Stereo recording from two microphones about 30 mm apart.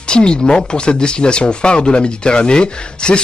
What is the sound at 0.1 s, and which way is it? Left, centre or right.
Speech, left.